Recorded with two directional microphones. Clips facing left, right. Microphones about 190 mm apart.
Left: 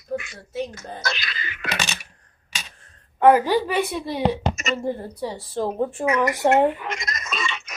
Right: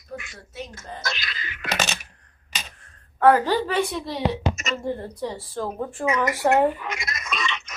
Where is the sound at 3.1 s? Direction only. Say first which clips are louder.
Left 2 dB; 15° left (ahead or behind).